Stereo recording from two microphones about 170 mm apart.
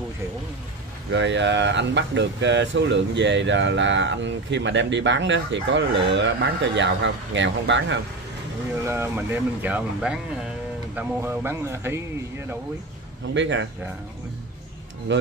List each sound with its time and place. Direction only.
1.1 s speech: 90° right
8.8 s speech: 15° right (ahead or behind)
13.3 s speech: 90° right
15.1 s speech: 90° right